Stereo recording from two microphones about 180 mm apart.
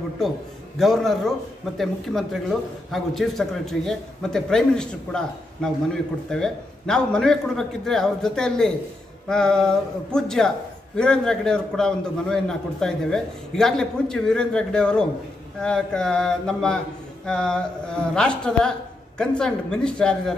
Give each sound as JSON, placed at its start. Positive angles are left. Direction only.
{"t": 0.7, "sound": "a man's voice", "side_deg": 0}